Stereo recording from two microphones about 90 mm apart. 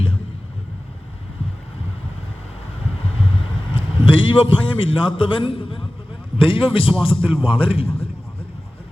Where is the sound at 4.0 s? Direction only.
75° left (ahead or behind); by 8.1 s 90° left.